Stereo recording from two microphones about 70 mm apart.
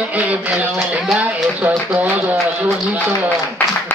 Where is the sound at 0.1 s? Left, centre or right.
Right.